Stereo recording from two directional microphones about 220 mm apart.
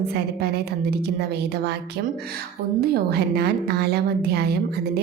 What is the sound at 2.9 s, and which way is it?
A woman's voice, 45° right (ahead or behind).